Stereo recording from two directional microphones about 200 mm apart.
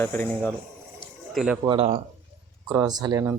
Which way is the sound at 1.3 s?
5° right (ahead or behind).